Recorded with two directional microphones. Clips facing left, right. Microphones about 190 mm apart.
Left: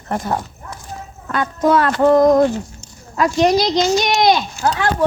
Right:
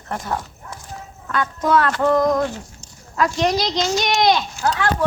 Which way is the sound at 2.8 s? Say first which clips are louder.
Left 2 dB; 10° left (ahead or behind).